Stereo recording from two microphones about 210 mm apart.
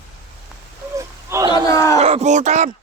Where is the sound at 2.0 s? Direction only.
30° right (ahead or behind).